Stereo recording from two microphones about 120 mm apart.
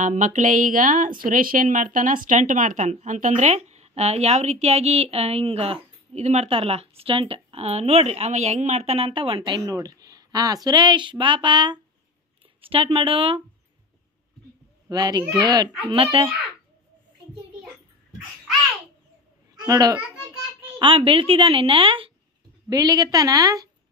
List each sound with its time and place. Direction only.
0.0 s a woman's voice: 90° right; by 13.4 s 45° right (ahead or behind)
14.9 s speech: 35° right (ahead or behind)
15.9 s a woman's voice: 45° right (ahead or behind)
19.5 s a child's voice: 35° right (ahead or behind)
20.8 s a woman's voice: 45° right (ahead or behind)
22.7 s speech: 30° right (ahead or behind)